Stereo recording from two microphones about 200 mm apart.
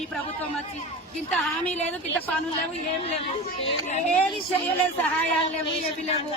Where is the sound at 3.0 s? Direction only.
30° left (ahead or behind).